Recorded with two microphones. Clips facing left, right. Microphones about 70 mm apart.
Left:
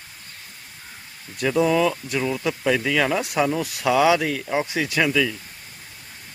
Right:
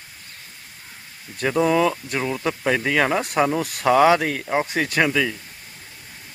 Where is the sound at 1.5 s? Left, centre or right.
Right.